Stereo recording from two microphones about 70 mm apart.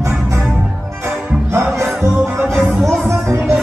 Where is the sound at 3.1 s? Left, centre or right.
Right.